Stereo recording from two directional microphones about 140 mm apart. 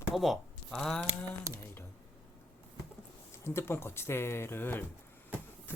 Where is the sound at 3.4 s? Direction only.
15° left (ahead or behind).